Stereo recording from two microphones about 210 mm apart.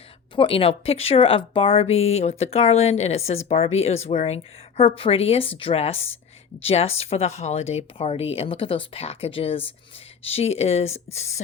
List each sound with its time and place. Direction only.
0.3 s speech: 25° left (ahead or behind)